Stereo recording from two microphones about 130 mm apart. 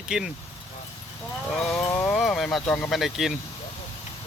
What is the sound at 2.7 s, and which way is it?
Speech, 5° left (ahead or behind).